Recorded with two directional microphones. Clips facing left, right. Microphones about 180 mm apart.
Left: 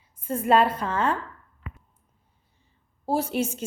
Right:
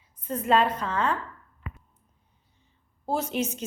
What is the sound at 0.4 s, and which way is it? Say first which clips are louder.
Speech: left 2 dB; 10° left (ahead or behind).